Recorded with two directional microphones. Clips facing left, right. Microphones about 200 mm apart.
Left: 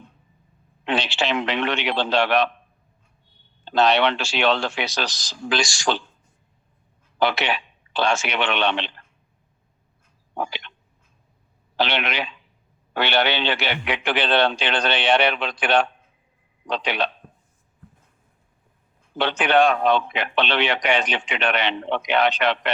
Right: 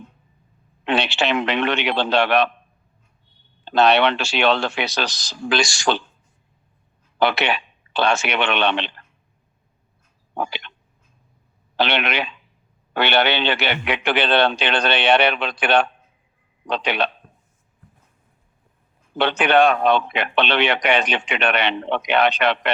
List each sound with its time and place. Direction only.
0.9 s a man's voice: 65° right (ahead or behind)
3.7 s a man's voice: 60° right (ahead or behind)
7.2 s a man's voice: 65° right (ahead or behind)
10.3 s a man's voice: 65° right (ahead or behind)
11.8 s a man's voice: 65° right (ahead or behind)
19.1 s a man's voice: 65° right (ahead or behind)